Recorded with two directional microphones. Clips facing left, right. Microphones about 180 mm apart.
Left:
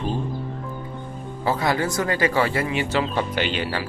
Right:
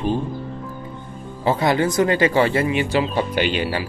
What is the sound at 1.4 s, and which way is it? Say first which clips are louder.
Speech: right 4 dB; 20° right (ahead or behind).